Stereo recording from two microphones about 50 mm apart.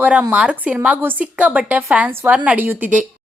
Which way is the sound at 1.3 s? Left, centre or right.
Right.